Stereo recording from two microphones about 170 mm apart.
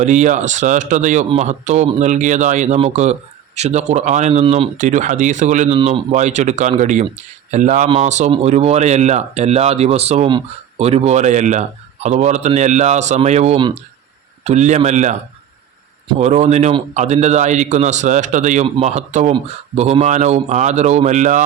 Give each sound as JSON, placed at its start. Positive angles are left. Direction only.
{"t": 0.0, "sound": "speech", "side_deg": -45}
{"t": 4.8, "sound": "speech", "side_deg": -45}
{"t": 16.1, "sound": "speech", "side_deg": -40}